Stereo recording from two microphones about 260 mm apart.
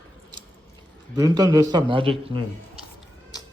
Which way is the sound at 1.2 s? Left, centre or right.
Centre.